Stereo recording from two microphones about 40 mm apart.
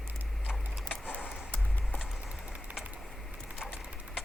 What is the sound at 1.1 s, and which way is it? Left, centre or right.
Music, left.